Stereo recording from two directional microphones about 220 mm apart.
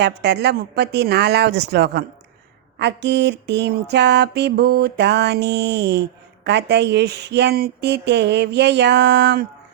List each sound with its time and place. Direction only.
0.0 s music: 50° right (ahead or behind)